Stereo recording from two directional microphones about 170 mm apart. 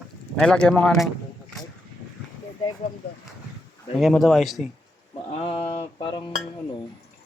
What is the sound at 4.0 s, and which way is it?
Speech, centre (ahead or behind).